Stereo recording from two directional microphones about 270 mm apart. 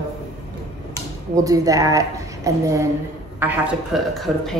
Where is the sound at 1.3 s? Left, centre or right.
Centre.